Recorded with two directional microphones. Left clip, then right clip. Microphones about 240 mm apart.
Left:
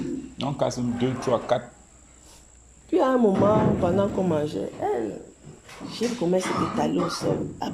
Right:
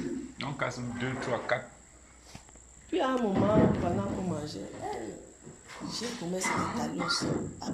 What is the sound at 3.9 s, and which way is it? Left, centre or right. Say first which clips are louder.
Speech: left 11 dB; left.